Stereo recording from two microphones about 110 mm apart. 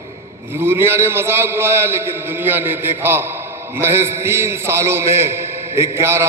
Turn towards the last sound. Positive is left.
turn(degrees=-25)  # may be behind; listen again after turning